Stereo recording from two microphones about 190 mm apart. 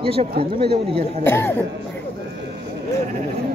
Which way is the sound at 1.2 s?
10° left (ahead or behind).